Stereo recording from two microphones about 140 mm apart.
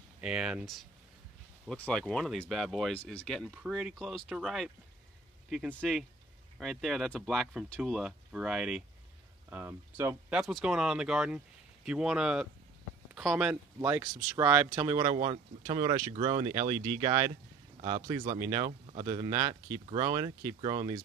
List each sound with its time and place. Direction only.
0.2 s speech: 5° right (ahead or behind)
10.4 s speech: centre (ahead or behind)
13.7 s speech: 20° right (ahead or behind)
18.7 s a man's voice: 45° right (ahead or behind)
19.0 s speech: 30° right (ahead or behind)